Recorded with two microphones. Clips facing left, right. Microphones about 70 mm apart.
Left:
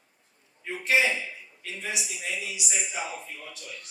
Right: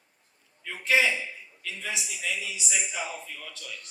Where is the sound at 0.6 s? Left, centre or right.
Left.